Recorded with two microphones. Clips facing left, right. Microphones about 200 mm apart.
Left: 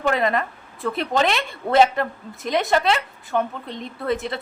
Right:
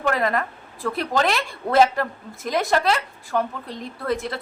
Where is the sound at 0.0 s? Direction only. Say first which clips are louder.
Left 1 dB; centre (ahead or behind).